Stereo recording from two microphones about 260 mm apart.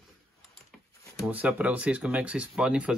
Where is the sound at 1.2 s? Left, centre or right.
Centre.